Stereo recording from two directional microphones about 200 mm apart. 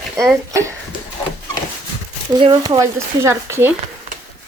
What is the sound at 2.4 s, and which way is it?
Speech, 20° right (ahead or behind).